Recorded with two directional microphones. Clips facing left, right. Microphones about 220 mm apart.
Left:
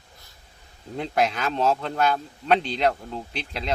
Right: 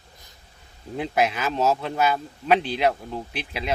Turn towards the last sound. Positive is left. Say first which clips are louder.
# right 1 dB
turn(degrees=-5)  # may be behind; listen again after turning